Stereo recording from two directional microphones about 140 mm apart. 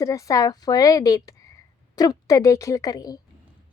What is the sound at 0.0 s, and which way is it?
A woman's voice, 25° left (ahead or behind).